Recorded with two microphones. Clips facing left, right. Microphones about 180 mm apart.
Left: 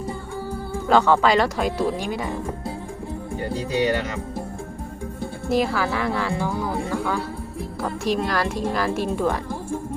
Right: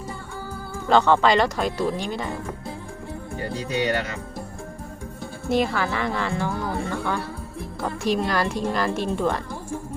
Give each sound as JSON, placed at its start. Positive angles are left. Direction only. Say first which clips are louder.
{"t": 0.9, "sound": "speech", "louder": "even", "side_deg": 5}
{"t": 5.5, "sound": "a woman's voice", "louder": "left 1 dB", "side_deg": 0}